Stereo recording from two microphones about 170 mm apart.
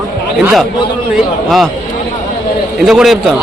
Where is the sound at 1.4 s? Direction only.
Centre (ahead or behind).